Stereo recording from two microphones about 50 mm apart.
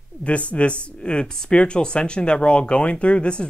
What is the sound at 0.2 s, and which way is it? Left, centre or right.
Speech, left.